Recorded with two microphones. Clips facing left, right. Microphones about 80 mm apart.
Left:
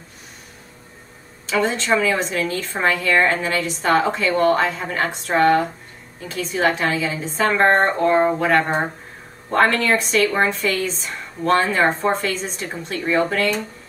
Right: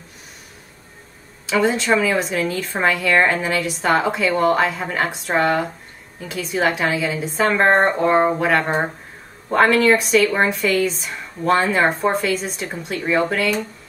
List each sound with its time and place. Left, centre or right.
1.4 s a woman's voice: centre
12.0 s speech: centre